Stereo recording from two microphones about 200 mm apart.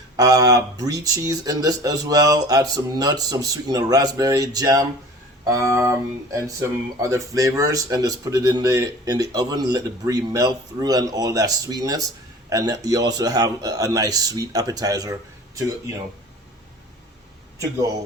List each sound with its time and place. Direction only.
0.2 s speech: 15° right (ahead or behind)